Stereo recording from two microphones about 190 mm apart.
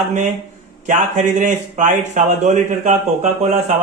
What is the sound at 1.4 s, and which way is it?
Speech, 40° right (ahead or behind).